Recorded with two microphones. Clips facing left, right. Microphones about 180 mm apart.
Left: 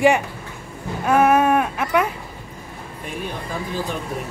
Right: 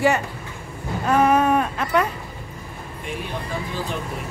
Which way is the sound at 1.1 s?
10° left (ahead or behind).